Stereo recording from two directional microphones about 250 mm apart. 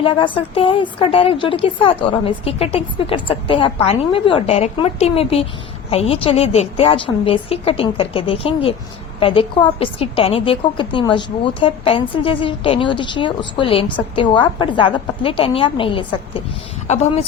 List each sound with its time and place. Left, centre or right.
0.0 s a woman's voice: left